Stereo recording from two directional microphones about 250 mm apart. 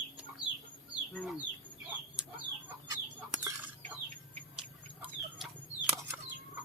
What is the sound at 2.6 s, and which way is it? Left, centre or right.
Chicken, centre.